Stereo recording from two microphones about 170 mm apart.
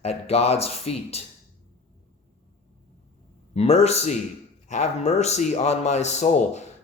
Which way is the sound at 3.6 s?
35° left (ahead or behind).